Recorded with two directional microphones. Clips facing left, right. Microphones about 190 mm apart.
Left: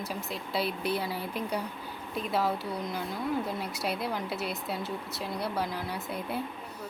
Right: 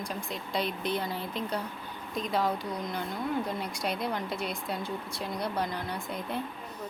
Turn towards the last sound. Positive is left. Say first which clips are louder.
# even
turn(degrees=5)  # may be behind; listen again after turning